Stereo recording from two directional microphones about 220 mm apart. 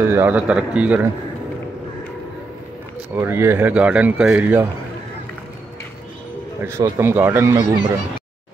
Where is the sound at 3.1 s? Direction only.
10° right (ahead or behind).